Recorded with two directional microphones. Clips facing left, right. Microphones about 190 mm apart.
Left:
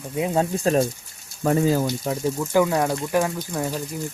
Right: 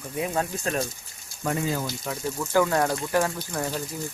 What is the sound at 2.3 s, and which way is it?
Speech, 15° left (ahead or behind).